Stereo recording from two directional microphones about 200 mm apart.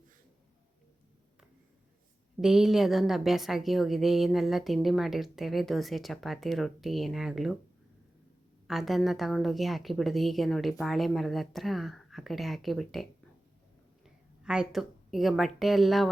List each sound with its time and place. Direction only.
2.4 s a woman's voice: centre (ahead or behind)
8.6 s a woman's voice: centre (ahead or behind)